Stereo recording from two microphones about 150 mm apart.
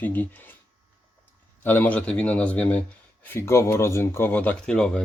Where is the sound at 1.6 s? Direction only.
10° left (ahead or behind).